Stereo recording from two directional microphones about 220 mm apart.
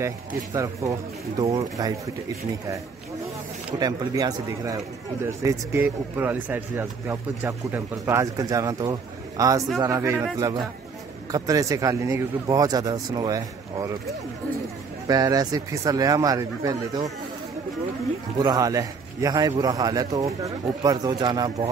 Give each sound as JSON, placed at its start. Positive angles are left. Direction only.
{"t": 0.0, "sound": "a man's voice", "side_deg": -15}
{"t": 3.8, "sound": "a man's voice", "side_deg": -15}
{"t": 11.3, "sound": "a man's voice", "side_deg": -15}
{"t": 15.0, "sound": "a man's voice", "side_deg": -15}
{"t": 18.4, "sound": "a man's voice", "side_deg": -15}